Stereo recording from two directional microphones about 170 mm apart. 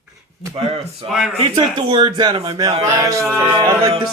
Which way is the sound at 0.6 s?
35° right (ahead or behind).